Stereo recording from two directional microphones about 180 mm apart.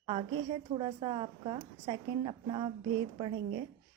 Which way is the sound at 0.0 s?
30° right (ahead or behind).